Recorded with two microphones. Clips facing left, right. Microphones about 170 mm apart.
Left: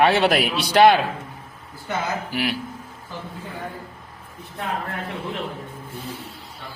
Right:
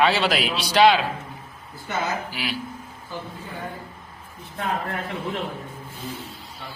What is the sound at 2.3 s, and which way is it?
Speech, 60° left (ahead or behind).